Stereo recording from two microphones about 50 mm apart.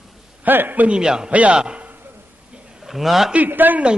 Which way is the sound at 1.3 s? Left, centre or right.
Right.